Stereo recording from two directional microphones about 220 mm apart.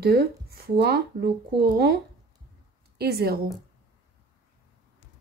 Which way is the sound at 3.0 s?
45° right (ahead or behind).